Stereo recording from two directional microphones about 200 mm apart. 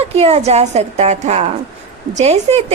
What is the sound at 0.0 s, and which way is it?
A woman's voice, 30° right (ahead or behind).